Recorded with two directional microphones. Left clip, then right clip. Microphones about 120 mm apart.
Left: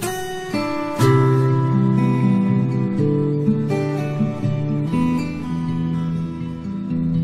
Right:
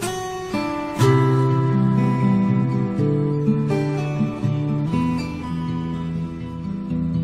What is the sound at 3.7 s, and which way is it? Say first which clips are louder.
Music: left 1 dB; 40° right (ahead or behind).